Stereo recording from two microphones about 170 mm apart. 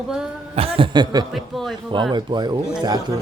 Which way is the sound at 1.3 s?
Centre (ahead or behind).